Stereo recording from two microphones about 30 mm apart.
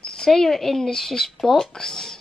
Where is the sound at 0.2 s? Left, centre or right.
Centre.